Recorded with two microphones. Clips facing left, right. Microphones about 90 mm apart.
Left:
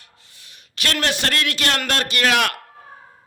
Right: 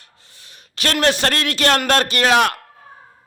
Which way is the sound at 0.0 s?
35° right (ahead or behind).